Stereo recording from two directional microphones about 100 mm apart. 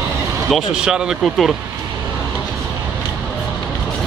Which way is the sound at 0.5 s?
10° right (ahead or behind).